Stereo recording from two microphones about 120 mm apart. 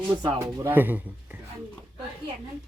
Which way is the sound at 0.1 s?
40° right (ahead or behind).